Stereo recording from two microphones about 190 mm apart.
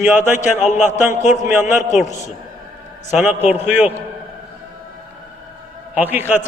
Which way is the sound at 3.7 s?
10° right (ahead or behind).